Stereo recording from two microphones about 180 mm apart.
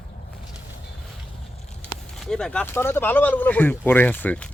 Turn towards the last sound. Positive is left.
turn(degrees=10)  # may be behind; listen again after turning